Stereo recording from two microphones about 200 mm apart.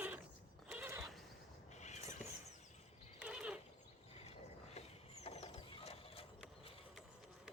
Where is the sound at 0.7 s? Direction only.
10° right (ahead or behind).